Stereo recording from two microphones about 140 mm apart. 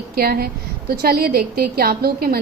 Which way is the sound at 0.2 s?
90° right.